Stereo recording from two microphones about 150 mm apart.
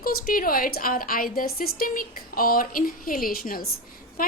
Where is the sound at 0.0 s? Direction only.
75° left (ahead or behind).